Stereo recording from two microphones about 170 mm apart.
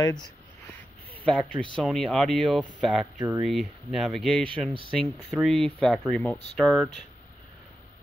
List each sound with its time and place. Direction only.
0.0 s speech: 25° left (ahead or behind)
1.1 s speech: 5° left (ahead or behind)
2.9 s speech: 5° right (ahead or behind)